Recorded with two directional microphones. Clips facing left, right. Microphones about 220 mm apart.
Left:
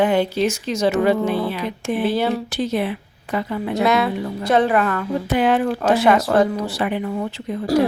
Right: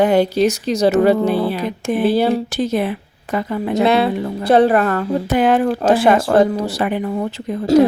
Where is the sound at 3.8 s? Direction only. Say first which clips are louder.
Right 3 dB; 30° right (ahead or behind).